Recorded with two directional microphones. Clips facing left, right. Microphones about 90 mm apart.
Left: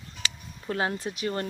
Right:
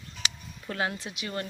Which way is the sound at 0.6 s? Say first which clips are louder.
Left 3 dB; 30° left (ahead or behind).